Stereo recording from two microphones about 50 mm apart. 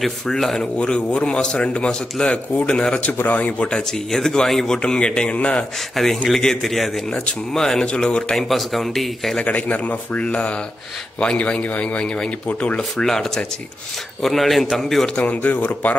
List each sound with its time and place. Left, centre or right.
0.0 s a man's voice: centre
0.7 s a man's voice: left
3.1 s a man's voice: left
4.1 s a man's voice: centre
5.9 s a man's voice: centre
8.5 s a man's voice: centre
9.4 s a man's voice: left
12.9 s a man's voice: centre
15.4 s speech: left